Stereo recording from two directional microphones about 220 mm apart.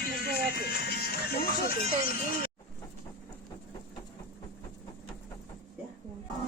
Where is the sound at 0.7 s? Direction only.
45° left (ahead or behind).